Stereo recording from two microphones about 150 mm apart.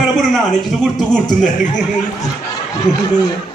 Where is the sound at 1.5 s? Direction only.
55° left (ahead or behind).